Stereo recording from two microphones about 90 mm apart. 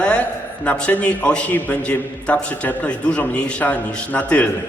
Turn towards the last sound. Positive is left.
turn(degrees=15)  # may be behind; listen again after turning